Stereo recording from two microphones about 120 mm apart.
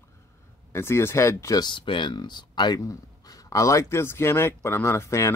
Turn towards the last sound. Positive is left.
turn(degrees=25)  # may be behind; listen again after turning